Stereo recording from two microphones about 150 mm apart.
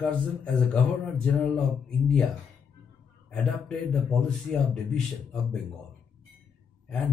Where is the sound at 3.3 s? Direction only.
5° left (ahead or behind).